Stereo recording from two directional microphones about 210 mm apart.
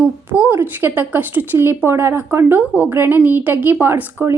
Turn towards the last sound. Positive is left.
turn(degrees=-10)  # may be behind; listen again after turning